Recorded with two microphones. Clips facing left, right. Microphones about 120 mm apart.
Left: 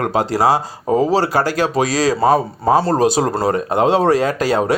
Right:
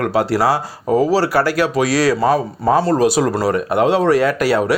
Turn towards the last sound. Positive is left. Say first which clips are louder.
# right 1 dB
turn(degrees=25)  # may be behind; listen again after turning